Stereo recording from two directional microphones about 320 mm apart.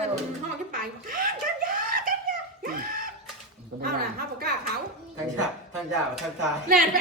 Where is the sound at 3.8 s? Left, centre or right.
Right.